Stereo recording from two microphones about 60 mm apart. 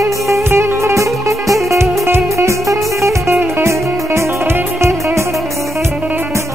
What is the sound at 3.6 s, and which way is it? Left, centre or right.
Music, right.